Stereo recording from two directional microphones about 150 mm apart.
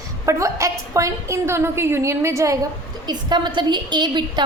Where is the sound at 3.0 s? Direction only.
30° right (ahead or behind).